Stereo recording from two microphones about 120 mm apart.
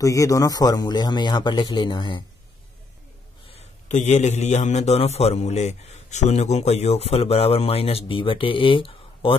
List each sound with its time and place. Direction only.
0.0 s a man's voice: 30° left (ahead or behind)
3.5 s a man's voice: 75° left (ahead or behind); by 9.4 s 45° left (ahead or behind)